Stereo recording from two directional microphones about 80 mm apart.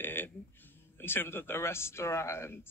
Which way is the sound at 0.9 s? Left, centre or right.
Left.